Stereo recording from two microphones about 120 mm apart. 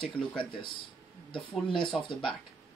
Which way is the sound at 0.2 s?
10° left (ahead or behind).